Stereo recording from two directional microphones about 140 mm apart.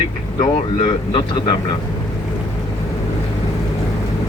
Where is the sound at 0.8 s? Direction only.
35° left (ahead or behind).